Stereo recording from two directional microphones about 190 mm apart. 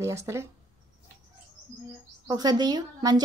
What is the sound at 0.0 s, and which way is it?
Speech, 15° right (ahead or behind).